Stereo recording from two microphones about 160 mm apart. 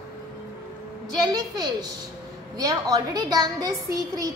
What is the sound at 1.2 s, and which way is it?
A woman's voice, 25° right (ahead or behind).